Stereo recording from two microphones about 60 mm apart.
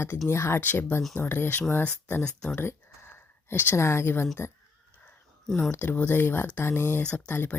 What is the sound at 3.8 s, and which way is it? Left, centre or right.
Speech, left.